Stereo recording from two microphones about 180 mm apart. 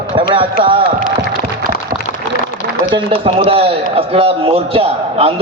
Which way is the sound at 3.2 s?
35° right (ahead or behind).